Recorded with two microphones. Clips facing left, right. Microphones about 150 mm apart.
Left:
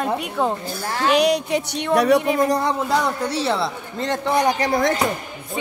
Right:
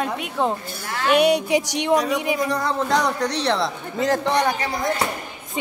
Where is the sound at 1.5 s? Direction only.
70° right (ahead or behind).